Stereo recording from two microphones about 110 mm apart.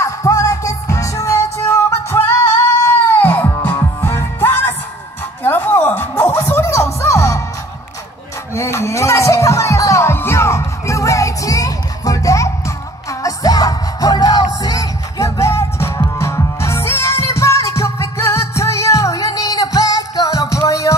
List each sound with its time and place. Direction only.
0.0 s music: 30° left (ahead or behind)
2.8 s baby cry: 20° left (ahead or behind)
3.6 s music: 20° left (ahead or behind)
8.5 s music: 25° left (ahead or behind)